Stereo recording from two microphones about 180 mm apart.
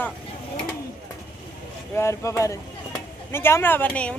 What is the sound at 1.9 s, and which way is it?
Speech, 15° left (ahead or behind).